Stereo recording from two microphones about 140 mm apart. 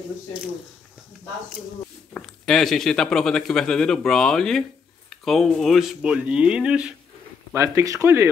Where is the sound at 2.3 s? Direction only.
5° left (ahead or behind).